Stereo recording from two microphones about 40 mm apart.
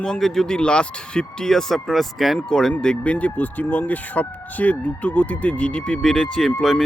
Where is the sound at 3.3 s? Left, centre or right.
Left.